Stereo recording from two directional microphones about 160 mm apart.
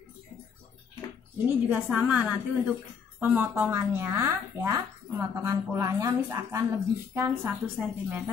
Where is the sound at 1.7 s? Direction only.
10° right (ahead or behind).